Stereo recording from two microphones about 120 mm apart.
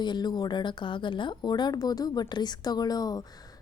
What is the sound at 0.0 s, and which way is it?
A woman's voice, 35° left (ahead or behind).